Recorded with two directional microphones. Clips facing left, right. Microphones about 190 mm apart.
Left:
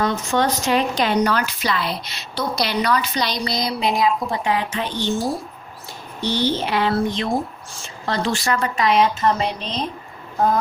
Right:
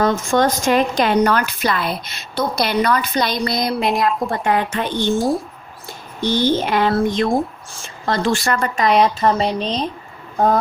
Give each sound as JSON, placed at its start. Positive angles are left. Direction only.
{"t": 0.0, "sound": "a woman's voice", "side_deg": -45}
{"t": 3.7, "sound": "speech", "side_deg": 0}
{"t": 4.4, "sound": "a woman's voice", "side_deg": -50}
{"t": 6.3, "sound": "a woman's voice", "side_deg": -50}